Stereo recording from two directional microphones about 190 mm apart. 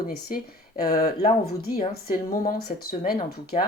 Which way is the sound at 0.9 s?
50° left (ahead or behind).